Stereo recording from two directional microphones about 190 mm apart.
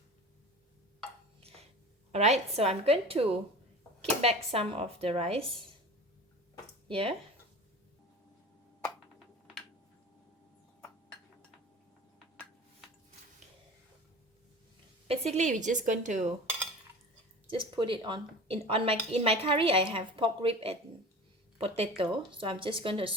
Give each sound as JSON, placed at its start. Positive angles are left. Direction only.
{"t": 1.4, "sound": "a sound", "side_deg": -30}
{"t": 2.1, "sound": "a woman's voice", "side_deg": -35}
{"t": 6.8, "sound": "speech", "side_deg": -30}
{"t": 10.8, "sound": "chink", "side_deg": 10}
{"t": 15.0, "sound": "a woman's voice", "side_deg": -30}
{"t": 17.5, "sound": "a woman's voice", "side_deg": -25}